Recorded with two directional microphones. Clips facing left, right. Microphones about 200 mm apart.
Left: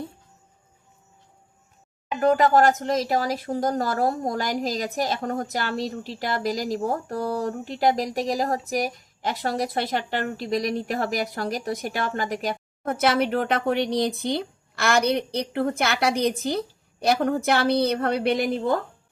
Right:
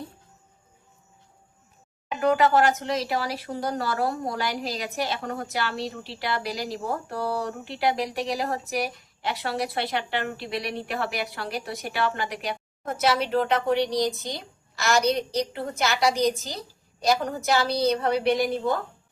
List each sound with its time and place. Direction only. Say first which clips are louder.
2.2 s a woman's voice: left 2 dB; 45° left (ahead or behind)